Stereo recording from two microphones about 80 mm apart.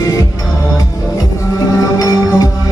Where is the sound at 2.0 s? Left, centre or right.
Left.